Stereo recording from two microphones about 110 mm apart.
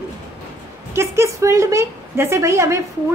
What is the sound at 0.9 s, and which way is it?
A woman's voice, 25° right (ahead or behind).